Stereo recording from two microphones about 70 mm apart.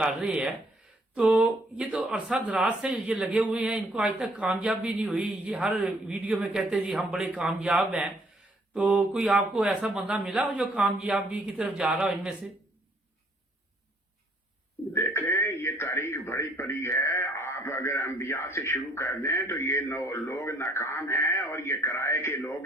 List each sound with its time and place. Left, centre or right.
0.2 s speech: centre
14.9 s radio: left
16.2 s a man's voice: left